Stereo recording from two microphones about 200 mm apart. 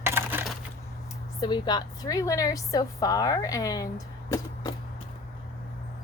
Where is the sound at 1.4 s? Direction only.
20° left (ahead or behind).